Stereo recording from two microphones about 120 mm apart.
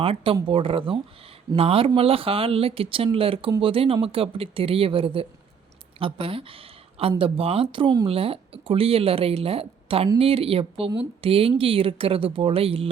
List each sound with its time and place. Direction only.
0.0 s a woman's voice: 50° right (ahead or behind)